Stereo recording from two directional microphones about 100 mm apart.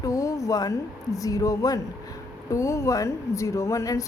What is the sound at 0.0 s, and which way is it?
A woman's voice, 35° left (ahead or behind).